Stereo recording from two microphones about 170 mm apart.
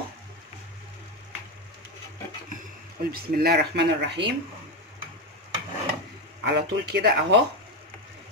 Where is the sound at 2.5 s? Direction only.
60° right (ahead or behind); by 4.3 s 80° right.